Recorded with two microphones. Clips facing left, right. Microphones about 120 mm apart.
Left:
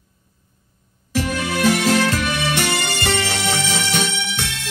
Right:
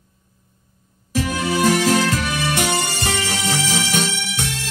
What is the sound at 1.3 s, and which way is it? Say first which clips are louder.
Music: right 1 dB; 60° left (ahead or behind).